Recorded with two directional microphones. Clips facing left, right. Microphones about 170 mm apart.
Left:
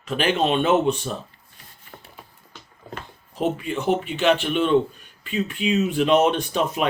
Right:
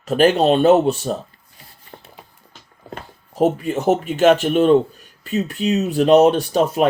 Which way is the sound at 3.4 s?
45° right (ahead or behind).